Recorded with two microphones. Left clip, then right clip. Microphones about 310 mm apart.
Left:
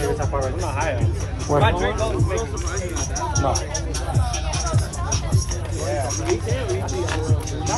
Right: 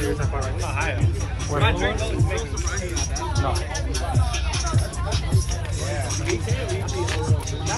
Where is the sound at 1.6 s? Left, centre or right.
Left.